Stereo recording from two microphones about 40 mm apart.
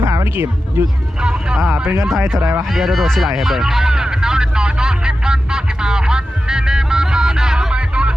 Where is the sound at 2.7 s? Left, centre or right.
Centre.